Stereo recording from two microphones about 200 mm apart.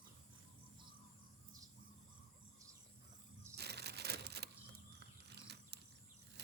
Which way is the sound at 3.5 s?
55° right (ahead or behind).